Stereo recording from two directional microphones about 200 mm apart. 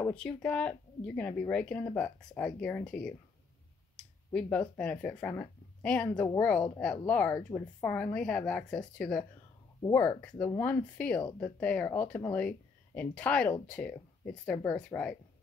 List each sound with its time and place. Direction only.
0.1 s speech: 5° left (ahead or behind)
6.2 s speech: 15° left (ahead or behind)
6.5 s speech: 5° left (ahead or behind)